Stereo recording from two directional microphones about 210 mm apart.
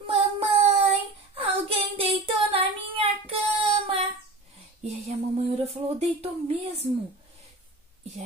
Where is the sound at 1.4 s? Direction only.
25° right (ahead or behind).